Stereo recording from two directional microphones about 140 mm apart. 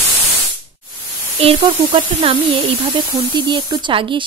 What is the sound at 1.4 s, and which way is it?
Speech, 40° right (ahead or behind).